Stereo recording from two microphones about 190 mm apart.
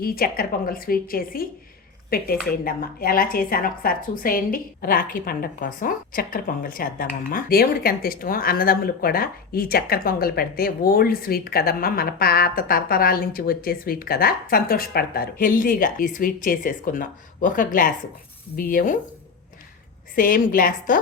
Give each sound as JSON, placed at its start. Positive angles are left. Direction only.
{"t": 0.0, "sound": "a woman's voice", "side_deg": 50}
{"t": 20.1, "sound": "a woman's voice", "side_deg": 45}